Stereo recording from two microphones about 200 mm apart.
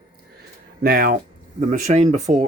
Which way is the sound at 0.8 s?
45° right (ahead or behind).